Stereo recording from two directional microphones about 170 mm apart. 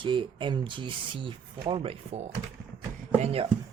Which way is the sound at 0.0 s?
30° right (ahead or behind).